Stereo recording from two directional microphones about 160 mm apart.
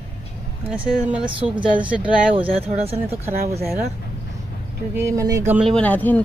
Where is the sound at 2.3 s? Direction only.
35° right (ahead or behind).